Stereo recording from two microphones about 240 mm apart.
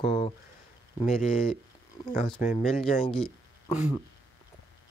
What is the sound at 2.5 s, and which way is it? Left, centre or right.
Speech, left.